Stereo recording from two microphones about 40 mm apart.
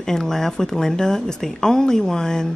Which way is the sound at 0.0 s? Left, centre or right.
Centre.